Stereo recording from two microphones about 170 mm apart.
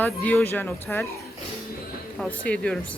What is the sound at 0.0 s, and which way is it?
Speech, 10° left (ahead or behind).